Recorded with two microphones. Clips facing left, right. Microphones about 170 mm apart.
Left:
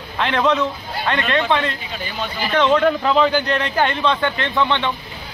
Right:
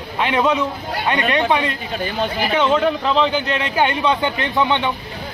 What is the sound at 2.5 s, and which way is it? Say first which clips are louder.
A man's voice: left 2 dB; 5° right (ahead or behind).